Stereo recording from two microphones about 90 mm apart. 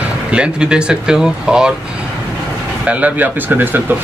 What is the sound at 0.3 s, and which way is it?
Speech, 10° right (ahead or behind).